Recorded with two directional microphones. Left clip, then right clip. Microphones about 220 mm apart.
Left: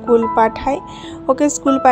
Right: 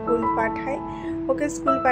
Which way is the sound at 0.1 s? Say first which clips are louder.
Left 9 dB; 35° left (ahead or behind).